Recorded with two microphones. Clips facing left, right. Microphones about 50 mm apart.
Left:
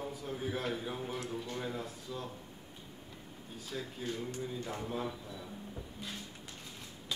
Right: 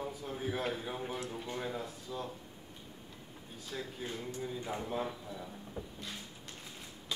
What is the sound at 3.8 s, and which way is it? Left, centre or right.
Speech, centre.